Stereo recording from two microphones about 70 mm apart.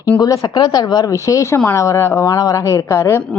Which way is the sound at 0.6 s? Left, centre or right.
Left.